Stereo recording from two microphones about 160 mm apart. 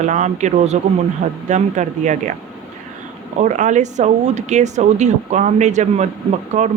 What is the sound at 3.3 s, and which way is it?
Speech, 50° right (ahead or behind).